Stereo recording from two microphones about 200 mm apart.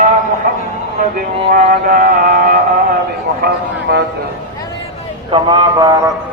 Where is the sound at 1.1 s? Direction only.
45° right (ahead or behind).